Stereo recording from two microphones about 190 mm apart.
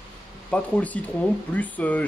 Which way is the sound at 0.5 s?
5° left (ahead or behind).